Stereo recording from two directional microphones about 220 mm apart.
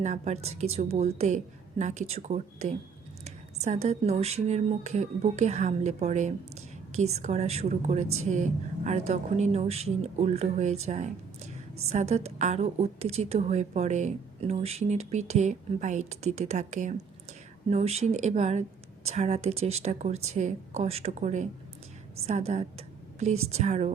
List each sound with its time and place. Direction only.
0.0 s a woman's voice: 30° right (ahead or behind)